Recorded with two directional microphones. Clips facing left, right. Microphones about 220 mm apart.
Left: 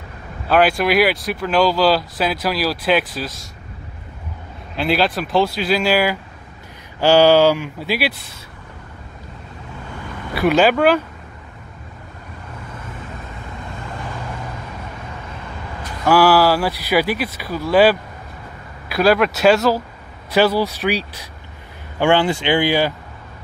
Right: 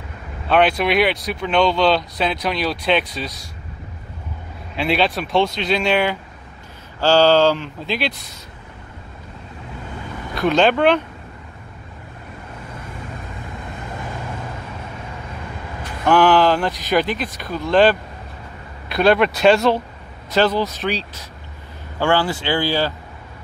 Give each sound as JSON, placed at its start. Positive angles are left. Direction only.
{"t": 0.5, "sound": "speech", "side_deg": 5}
{"t": 4.7, "sound": "speech", "side_deg": 0}
{"t": 10.3, "sound": "speech", "side_deg": 5}
{"t": 16.1, "sound": "speech", "side_deg": 5}